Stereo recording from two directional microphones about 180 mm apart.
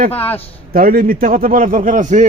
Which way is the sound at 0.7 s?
55° right (ahead or behind).